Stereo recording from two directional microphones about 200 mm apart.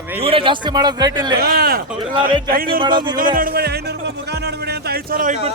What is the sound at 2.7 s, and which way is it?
Speech, 25° right (ahead or behind).